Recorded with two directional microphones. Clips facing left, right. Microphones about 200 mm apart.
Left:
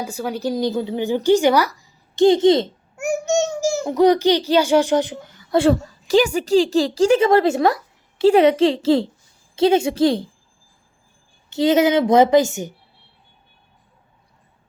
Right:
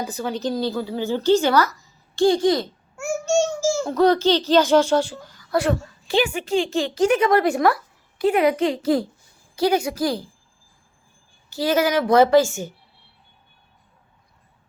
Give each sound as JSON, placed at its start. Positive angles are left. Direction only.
{"t": 0.0, "sound": "speech", "side_deg": 10}
{"t": 3.2, "sound": "a sound", "side_deg": 20}
{"t": 3.8, "sound": "a child's voice", "side_deg": 15}
{"t": 11.4, "sound": "a child's voice", "side_deg": 20}